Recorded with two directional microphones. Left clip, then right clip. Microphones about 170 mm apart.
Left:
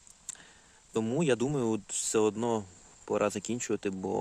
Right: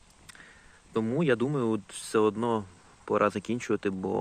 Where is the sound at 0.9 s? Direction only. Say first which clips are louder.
Right 2 dB; 30° left (ahead or behind).